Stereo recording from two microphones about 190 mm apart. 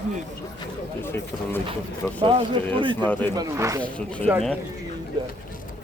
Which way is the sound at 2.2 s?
30° right (ahead or behind).